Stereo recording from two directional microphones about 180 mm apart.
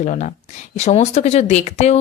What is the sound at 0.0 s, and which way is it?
A woman's voice, 45° left (ahead or behind).